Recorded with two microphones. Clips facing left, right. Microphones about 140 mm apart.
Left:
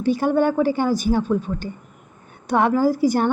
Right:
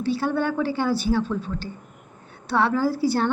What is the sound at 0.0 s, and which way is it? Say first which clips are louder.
A woman's voice: left 5 dB; 15° left (ahead or behind).